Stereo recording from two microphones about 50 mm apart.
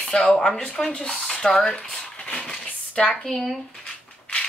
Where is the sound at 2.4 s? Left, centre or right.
Centre.